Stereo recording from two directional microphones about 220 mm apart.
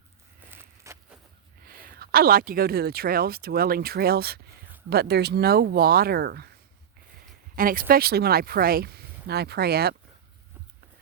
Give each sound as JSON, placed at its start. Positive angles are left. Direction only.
{"t": 0.5, "sound": "a sound", "side_deg": -10}
{"t": 1.6, "sound": "speech", "side_deg": -45}
{"t": 7.5, "sound": "speech", "side_deg": -40}